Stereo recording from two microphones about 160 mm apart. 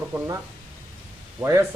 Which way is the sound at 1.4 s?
20° right (ahead or behind).